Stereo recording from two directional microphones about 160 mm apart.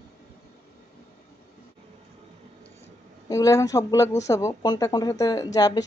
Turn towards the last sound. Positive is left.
turn(degrees=25)  # may be behind; listen again after turning